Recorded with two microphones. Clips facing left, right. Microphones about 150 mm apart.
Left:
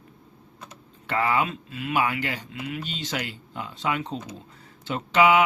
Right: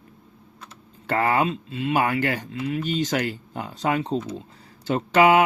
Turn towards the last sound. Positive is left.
turn(degrees=-45)  # may be behind; listen again after turning